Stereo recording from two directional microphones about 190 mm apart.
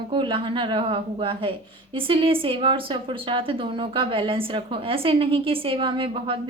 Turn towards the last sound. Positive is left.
turn(degrees=-25)  # may be behind; listen again after turning